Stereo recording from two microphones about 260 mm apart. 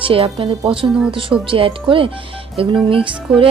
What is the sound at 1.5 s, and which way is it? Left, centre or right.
A woman's voice, centre.